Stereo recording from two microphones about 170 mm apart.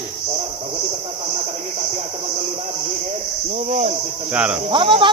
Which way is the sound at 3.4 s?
40° right (ahead or behind).